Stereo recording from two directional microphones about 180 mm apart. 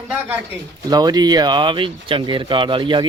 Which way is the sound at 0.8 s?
20° right (ahead or behind).